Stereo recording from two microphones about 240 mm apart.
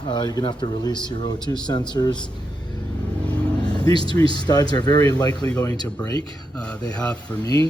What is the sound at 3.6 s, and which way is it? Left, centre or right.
Speech, centre.